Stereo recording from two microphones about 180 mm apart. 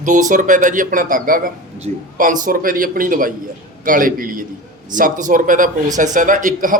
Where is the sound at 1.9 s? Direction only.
40° right (ahead or behind).